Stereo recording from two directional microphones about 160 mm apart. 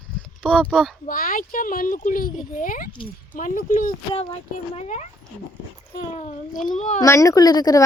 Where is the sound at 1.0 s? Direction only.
60° left (ahead or behind).